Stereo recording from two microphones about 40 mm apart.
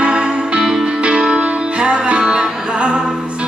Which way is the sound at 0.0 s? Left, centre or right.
Right.